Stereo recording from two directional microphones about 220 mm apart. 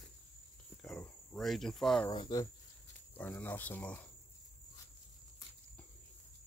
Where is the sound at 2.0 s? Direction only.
20° left (ahead or behind).